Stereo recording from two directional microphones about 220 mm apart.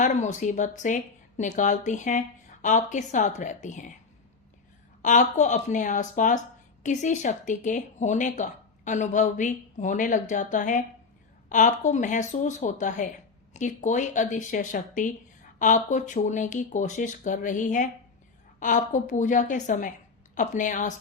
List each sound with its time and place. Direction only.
0.0 s speech: 35° left (ahead or behind)
5.0 s speech: 35° left (ahead or behind)